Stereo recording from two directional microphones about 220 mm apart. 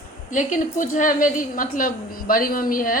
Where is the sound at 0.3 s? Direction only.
35° left (ahead or behind).